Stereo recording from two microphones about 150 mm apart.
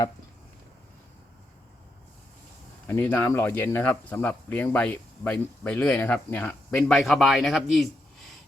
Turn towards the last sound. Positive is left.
turn(degrees=0)  # may be behind; listen again after turning